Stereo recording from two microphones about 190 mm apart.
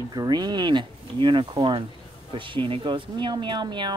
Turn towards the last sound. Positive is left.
turn(degrees=-25)  # may be behind; listen again after turning